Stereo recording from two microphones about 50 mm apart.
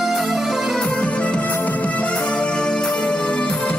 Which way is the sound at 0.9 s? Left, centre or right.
Left.